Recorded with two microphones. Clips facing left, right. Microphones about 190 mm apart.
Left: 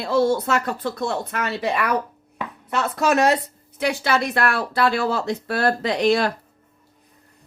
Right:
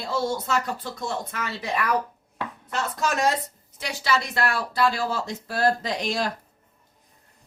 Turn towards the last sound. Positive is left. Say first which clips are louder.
# left 8 dB
turn(degrees=65)  # may be behind; listen again after turning